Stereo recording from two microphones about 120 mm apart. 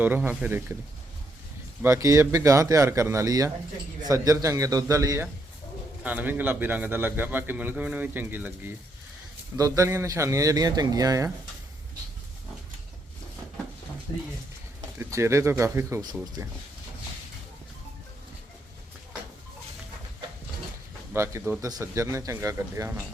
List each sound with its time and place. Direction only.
0.0 s a man's voice: 15° right (ahead or behind)
1.8 s a man's voice: 25° right (ahead or behind)
6.0 s a man's voice: 15° right (ahead or behind)
9.6 s a man's voice: 25° right (ahead or behind)
14.9 s a man's voice: 25° right (ahead or behind)
21.1 s a man's voice: 20° right (ahead or behind)